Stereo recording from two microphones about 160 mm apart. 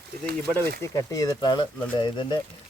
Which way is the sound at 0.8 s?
20° left (ahead or behind).